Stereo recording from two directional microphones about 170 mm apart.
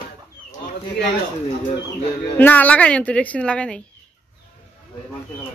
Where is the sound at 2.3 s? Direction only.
10° left (ahead or behind).